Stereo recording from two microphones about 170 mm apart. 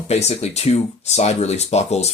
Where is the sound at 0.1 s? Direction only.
40° left (ahead or behind).